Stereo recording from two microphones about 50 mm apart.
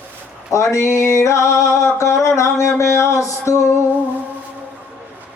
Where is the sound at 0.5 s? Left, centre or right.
Left.